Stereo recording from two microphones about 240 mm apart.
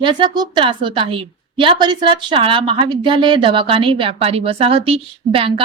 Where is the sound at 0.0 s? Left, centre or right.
Centre.